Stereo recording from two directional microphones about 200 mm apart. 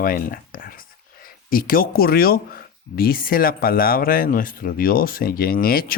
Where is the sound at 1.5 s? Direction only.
45° left (ahead or behind).